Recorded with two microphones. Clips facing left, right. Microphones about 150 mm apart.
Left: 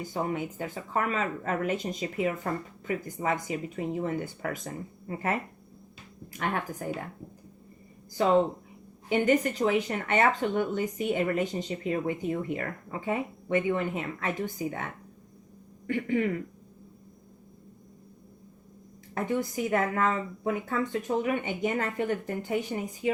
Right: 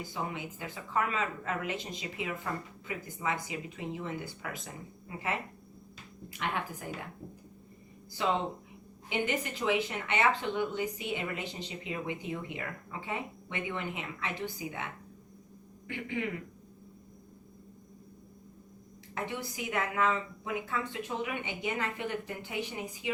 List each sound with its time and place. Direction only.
0.1 s speech: 45° left (ahead or behind)
9.0 s speech: 45° left (ahead or behind)
15.9 s speech: 45° left (ahead or behind)
19.1 s speech: 45° left (ahead or behind)